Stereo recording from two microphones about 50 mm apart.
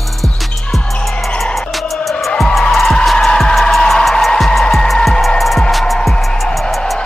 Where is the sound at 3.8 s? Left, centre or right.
Centre.